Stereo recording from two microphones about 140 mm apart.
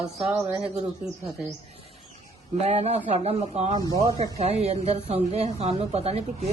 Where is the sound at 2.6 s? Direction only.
50° right (ahead or behind).